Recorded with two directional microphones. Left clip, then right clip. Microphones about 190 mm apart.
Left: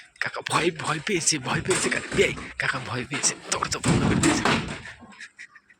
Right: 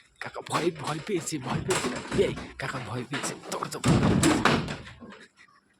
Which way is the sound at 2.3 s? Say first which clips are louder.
Left 7 dB; 20° right (ahead or behind).